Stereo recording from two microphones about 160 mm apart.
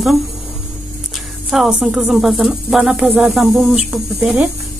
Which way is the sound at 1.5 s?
5° right (ahead or behind).